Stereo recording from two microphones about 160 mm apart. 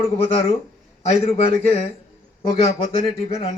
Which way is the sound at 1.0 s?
40° left (ahead or behind).